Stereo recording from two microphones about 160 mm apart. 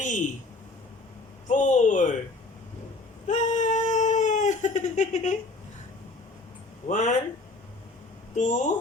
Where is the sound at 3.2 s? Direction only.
50° left (ahead or behind).